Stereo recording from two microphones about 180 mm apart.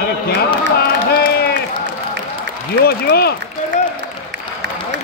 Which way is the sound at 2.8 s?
60° left (ahead or behind).